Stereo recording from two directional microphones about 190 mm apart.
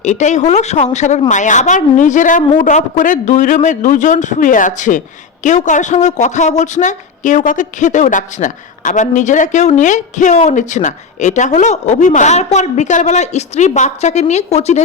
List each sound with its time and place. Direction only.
0.0 s a man's voice: 40° left (ahead or behind)